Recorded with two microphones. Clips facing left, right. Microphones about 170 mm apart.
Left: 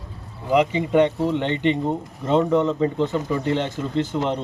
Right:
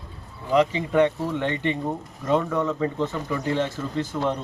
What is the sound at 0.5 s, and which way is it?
Speech, 15° left (ahead or behind).